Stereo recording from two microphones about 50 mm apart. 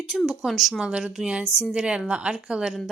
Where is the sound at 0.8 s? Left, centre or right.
Centre.